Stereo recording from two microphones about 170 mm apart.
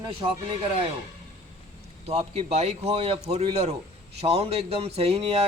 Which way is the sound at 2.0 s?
40° right (ahead or behind).